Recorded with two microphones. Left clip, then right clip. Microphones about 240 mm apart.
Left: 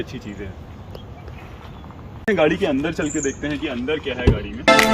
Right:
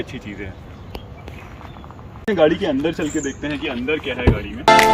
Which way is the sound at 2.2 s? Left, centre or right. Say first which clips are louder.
Right 2 dB; centre.